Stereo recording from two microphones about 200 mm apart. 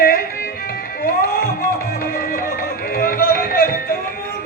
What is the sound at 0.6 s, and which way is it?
Music, 45° left (ahead or behind).